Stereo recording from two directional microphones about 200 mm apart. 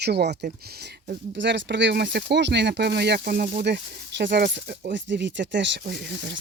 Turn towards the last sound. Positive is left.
turn(degrees=-55)  # may be behind; listen again after turning